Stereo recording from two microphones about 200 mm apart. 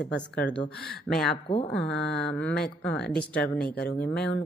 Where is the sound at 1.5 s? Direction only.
30° left (ahead or behind).